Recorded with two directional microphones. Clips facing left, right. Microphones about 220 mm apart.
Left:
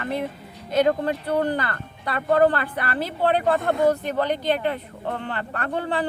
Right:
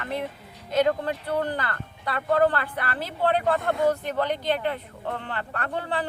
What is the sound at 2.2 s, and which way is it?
Speech, 50° left (ahead or behind).